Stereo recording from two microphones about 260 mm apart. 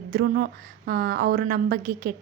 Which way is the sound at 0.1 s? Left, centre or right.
Right.